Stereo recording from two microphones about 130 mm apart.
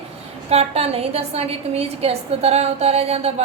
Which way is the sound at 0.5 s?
50° right (ahead or behind).